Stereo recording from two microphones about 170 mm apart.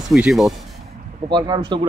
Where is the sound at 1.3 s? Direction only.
25° right (ahead or behind).